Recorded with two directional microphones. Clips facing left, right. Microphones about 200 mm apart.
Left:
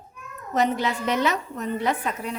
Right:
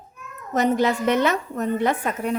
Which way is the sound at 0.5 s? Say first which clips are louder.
Right 4 dB; 45° right (ahead or behind).